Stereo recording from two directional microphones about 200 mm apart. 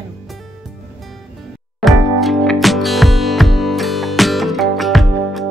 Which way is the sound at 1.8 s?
Centre (ahead or behind).